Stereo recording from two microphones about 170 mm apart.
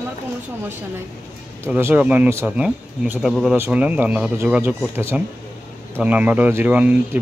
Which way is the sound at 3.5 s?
10° right (ahead or behind).